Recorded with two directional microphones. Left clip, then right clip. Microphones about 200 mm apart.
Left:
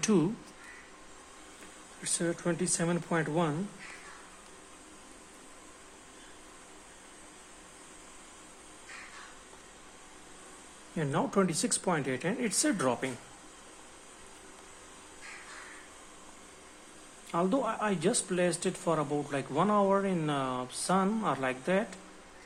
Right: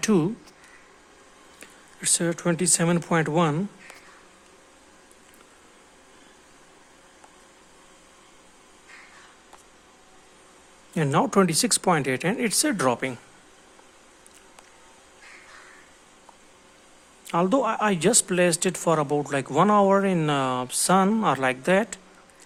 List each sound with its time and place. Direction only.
0.0 s speech: 35° right (ahead or behind)
2.0 s speech: 50° right (ahead or behind)
10.9 s speech: 50° right (ahead or behind)
17.2 s speech: 45° right (ahead or behind)